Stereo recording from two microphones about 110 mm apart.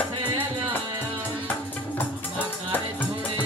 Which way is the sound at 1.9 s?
20° left (ahead or behind).